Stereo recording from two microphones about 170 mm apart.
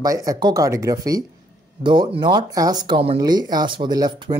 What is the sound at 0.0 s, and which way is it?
Speech, 20° right (ahead or behind).